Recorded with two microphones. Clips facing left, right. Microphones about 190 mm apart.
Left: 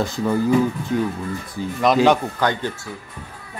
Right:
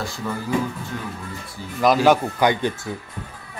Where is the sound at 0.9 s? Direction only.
20° left (ahead or behind).